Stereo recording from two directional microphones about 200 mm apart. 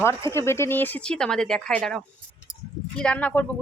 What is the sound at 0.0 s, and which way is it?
A woman's voice, 15° left (ahead or behind).